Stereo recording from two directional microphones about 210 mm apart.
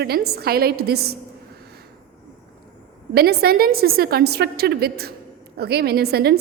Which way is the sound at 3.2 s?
50° right (ahead or behind).